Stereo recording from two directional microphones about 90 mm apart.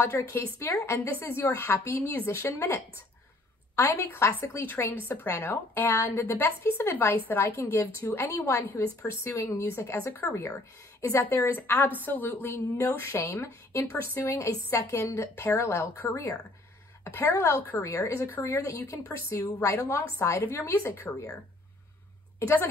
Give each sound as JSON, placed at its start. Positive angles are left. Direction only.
{"t": 0.0, "sound": "a woman's voice", "side_deg": 30}
{"t": 22.4, "sound": "a woman's voice", "side_deg": 30}